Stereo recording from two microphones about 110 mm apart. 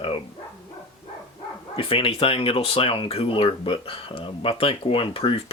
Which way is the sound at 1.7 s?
55° left (ahead or behind).